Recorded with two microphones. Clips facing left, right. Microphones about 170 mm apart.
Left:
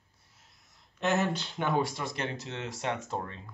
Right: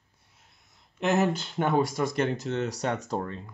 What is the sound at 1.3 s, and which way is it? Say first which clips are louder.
Speech: right 4 dB; 50° right (ahead or behind).